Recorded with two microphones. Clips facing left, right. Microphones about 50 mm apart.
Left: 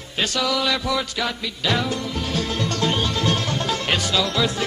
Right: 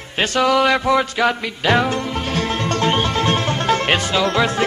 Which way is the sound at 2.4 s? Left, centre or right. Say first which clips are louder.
Right 4 dB; right.